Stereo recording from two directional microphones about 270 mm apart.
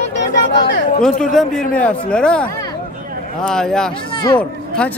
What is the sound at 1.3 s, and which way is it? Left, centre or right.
A man's voice, centre.